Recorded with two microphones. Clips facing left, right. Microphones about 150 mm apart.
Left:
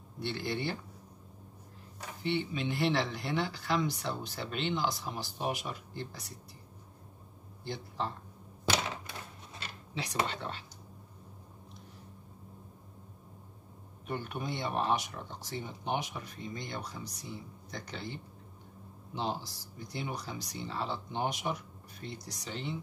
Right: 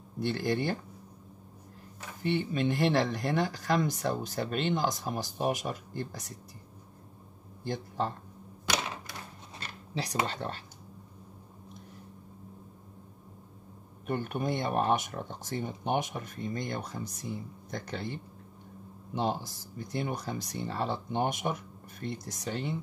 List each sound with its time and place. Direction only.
0.2 s speech: 45° right (ahead or behind)
2.2 s speech: 50° right (ahead or behind)
7.6 s speech: 50° right (ahead or behind)
10.2 s speech: 40° right (ahead or behind)
14.0 s speech: 50° right (ahead or behind)